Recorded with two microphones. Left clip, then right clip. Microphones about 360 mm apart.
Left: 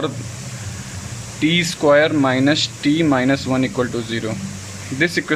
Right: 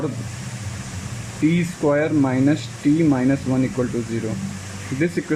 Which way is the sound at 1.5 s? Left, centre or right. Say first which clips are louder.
Left 9 dB; left.